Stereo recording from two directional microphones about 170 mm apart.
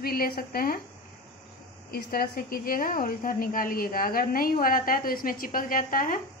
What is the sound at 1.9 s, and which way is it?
A woman's voice, 60° left (ahead or behind).